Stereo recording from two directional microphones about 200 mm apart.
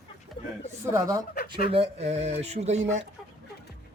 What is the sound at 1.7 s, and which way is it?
Speech, 30° right (ahead or behind).